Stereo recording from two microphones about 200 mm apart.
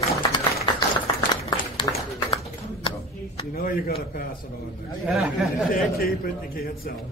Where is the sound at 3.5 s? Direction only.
45° left (ahead or behind).